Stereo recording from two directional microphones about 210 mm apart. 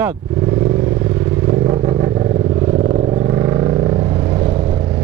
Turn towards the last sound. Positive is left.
turn(degrees=-20)  # may be behind; listen again after turning